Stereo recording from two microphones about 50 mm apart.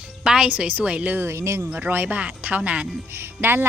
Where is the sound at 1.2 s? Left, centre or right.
Right.